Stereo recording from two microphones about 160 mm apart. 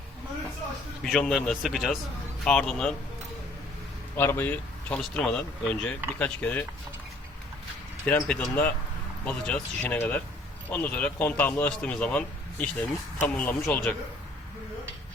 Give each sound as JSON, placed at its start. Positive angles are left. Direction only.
{"t": 1.0, "sound": "speech", "side_deg": 0}
{"t": 4.1, "sound": "a man's voice", "side_deg": 15}
{"t": 8.0, "sound": "a man's voice", "side_deg": 10}